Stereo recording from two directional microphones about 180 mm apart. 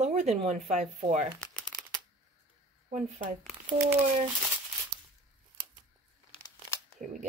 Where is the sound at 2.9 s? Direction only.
45° right (ahead or behind).